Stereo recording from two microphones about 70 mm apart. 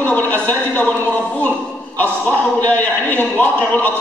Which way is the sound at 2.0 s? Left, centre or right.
Left.